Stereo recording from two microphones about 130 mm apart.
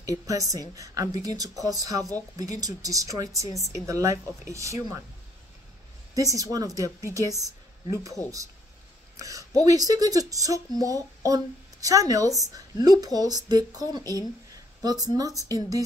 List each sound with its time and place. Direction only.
0.0 s speech: 25° right (ahead or behind)
6.1 s speech: 25° right (ahead or behind)